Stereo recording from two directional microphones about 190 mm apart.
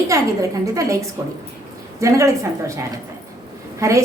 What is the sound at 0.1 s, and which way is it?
A woman's voice, 15° right (ahead or behind).